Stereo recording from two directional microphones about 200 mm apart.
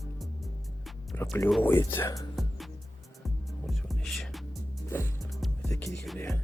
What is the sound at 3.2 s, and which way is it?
Music, centre (ahead or behind).